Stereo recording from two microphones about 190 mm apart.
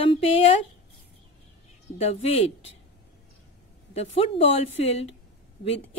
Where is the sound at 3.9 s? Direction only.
35° left (ahead or behind).